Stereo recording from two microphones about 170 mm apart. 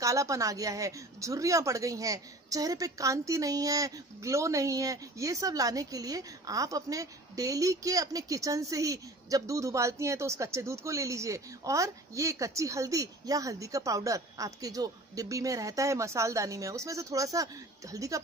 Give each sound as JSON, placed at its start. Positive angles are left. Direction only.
{"t": 0.0, "sound": "speech", "side_deg": -20}